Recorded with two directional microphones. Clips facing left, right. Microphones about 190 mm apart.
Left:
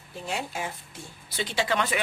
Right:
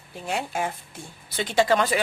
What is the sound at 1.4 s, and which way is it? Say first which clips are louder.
Speech: right 6 dB; 45° right (ahead or behind).